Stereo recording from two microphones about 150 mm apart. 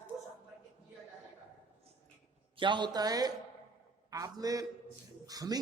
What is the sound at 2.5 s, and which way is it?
A man's voice, 30° right (ahead or behind).